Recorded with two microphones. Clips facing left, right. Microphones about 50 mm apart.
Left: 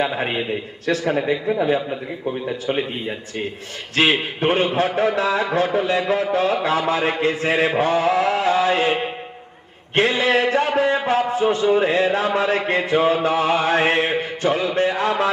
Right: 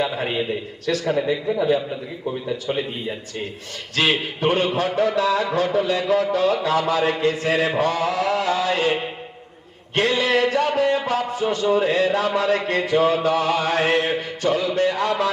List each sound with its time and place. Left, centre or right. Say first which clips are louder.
0.2 s a man's voice: left 1 dB; left
6.3 s a sound: even; left
7.8 s music: left 3 dB; left
9.9 s a man's voice: left 2 dB; left